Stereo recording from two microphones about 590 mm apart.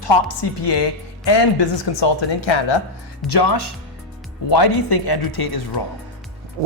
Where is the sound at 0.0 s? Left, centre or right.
Left.